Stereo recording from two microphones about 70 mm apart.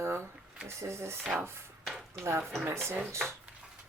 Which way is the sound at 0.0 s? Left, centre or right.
Right.